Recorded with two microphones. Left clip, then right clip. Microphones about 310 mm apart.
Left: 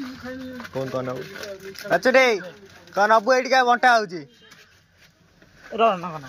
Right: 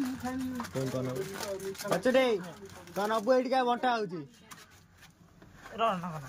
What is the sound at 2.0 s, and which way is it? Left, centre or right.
Speech, centre.